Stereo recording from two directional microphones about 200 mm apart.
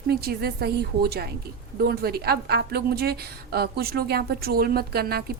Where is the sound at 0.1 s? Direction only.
50° right (ahead or behind).